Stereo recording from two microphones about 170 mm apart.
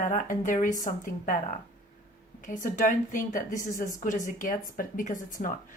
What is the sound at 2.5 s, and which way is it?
Speech, 50° left (ahead or behind).